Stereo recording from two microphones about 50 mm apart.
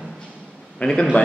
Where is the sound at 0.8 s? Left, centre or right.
Left.